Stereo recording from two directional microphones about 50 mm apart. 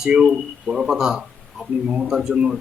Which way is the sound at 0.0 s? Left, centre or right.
Centre.